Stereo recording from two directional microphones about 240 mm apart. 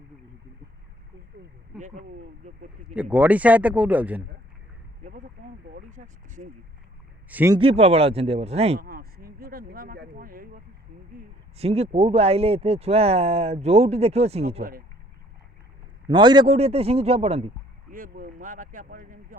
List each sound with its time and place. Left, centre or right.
2.9 s speech: centre
5.0 s speech: right
7.3 s a man's voice: centre
7.6 s speech: right
8.8 s speech: right
11.2 s speech: right
16.0 s speech: centre
17.9 s speech: right